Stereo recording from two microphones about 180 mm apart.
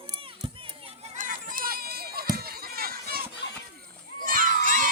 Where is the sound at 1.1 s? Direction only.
45° right (ahead or behind).